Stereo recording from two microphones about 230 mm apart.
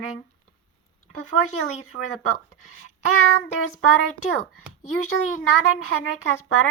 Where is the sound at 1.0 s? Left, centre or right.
Left.